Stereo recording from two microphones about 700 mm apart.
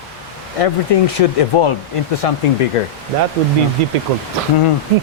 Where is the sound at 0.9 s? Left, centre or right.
Left.